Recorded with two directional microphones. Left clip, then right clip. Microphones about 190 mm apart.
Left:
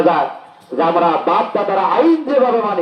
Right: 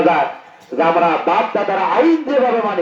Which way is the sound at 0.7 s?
30° right (ahead or behind).